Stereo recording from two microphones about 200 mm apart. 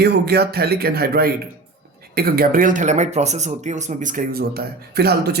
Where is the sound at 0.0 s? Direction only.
55° right (ahead or behind).